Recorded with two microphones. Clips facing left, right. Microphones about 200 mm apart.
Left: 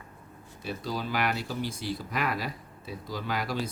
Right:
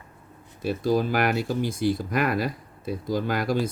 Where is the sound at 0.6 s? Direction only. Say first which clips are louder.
Right 10 dB; 50° right (ahead or behind).